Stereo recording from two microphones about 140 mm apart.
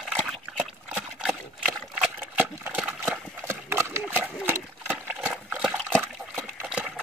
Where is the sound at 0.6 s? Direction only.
10° right (ahead or behind).